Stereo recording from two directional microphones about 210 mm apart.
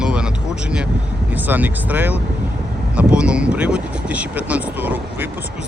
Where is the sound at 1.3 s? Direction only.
10° right (ahead or behind).